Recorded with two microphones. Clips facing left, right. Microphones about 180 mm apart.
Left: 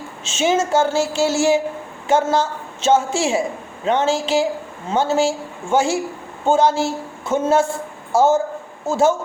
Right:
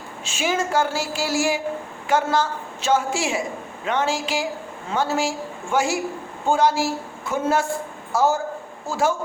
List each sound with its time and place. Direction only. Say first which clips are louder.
0.3 s a woman's voice: left 6 dB; 25° left (ahead or behind)